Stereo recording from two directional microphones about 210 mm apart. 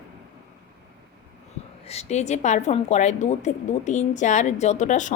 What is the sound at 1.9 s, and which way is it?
A woman's voice, 30° left (ahead or behind).